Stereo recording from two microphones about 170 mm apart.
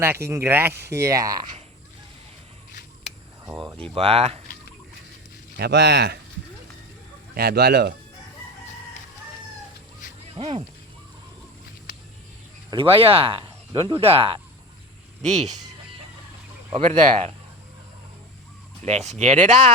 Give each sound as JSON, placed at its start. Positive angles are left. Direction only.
{"t": 0.3, "sound": "speech", "side_deg": -15}
{"t": 3.9, "sound": "speech", "side_deg": -35}
{"t": 5.5, "sound": "speech", "side_deg": -75}
{"t": 7.3, "sound": "speech", "side_deg": -65}
{"t": 10.3, "sound": "speech", "side_deg": -35}
{"t": 12.7, "sound": "speech", "side_deg": -35}
{"t": 15.2, "sound": "speech", "side_deg": -40}
{"t": 16.7, "sound": "speech", "side_deg": -40}
{"t": 18.8, "sound": "speech", "side_deg": -40}